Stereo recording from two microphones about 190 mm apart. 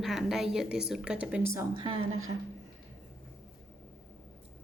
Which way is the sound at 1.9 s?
90° right.